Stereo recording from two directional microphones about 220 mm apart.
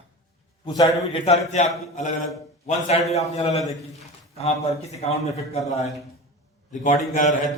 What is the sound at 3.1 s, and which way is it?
Speech, 30° left (ahead or behind).